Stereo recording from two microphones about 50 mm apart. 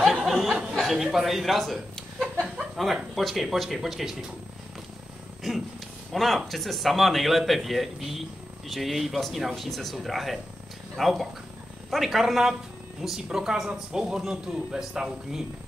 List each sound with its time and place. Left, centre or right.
0.2 s a sound: centre
0.7 s a man's voice: centre
6.1 s speech: centre